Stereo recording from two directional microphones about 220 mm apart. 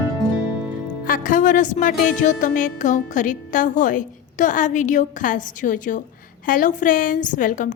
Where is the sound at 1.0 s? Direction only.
40° left (ahead or behind).